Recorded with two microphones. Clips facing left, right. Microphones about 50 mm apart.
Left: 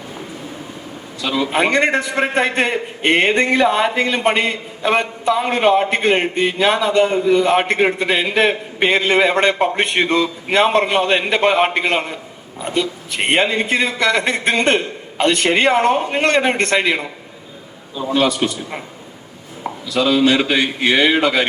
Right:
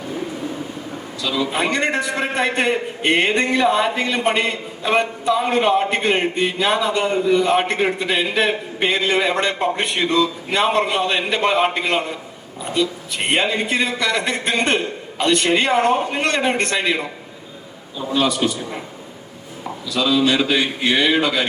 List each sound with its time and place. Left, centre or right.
1.2 s a man's voice: left
19.9 s a man's voice: left